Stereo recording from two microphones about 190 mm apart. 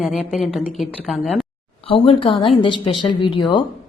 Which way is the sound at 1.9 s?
30° left (ahead or behind).